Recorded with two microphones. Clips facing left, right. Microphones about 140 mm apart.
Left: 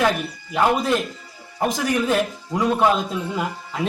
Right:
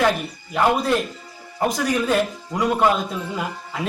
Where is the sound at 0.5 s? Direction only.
15° left (ahead or behind).